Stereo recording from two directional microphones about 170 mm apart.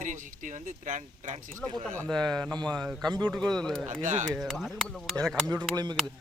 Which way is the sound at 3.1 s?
25° right (ahead or behind).